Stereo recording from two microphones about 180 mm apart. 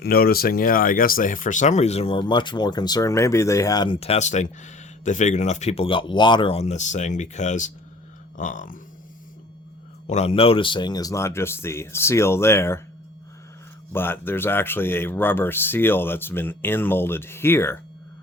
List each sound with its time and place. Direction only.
0.0 s speech: 55° left (ahead or behind); by 3.9 s 20° left (ahead or behind)
4.0 s speech: 35° left (ahead or behind)
10.1 s speech: 35° left (ahead or behind); by 12.8 s 15° left (ahead or behind)
13.9 s speech: 10° left (ahead or behind)